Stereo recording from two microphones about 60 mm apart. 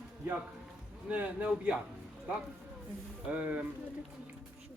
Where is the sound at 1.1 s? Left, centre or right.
Right.